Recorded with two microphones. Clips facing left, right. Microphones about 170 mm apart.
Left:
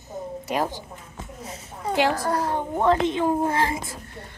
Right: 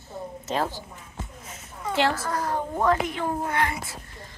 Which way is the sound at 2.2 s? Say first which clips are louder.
Left 3 dB; 30° left (ahead or behind).